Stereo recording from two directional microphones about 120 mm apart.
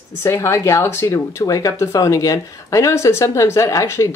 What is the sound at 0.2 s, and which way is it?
Speech, 25° left (ahead or behind).